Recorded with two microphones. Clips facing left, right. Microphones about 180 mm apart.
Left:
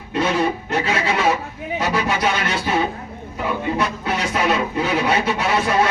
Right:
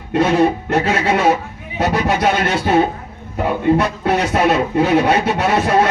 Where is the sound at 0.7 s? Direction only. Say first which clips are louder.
Right 5 dB; 55° right (ahead or behind).